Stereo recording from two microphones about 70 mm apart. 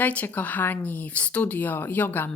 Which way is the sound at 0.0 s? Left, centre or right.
Left.